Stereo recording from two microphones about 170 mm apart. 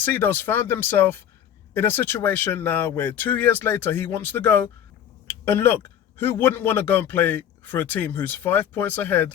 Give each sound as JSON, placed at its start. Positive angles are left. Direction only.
{"t": 0.0, "sound": "speech", "side_deg": 10}